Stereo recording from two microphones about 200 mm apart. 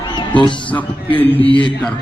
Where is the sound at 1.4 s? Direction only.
25° left (ahead or behind).